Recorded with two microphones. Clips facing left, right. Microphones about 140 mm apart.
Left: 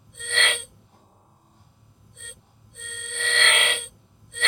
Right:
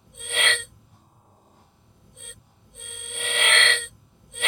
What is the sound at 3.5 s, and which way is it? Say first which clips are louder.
Telephone bell ringing: right 1 dB; 15° left (ahead or behind).